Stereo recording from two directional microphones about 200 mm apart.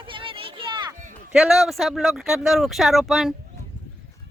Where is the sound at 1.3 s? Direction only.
Centre (ahead or behind).